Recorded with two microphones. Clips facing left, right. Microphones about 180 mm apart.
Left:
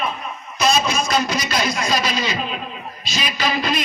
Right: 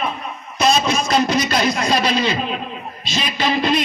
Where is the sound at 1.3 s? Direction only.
50° right (ahead or behind).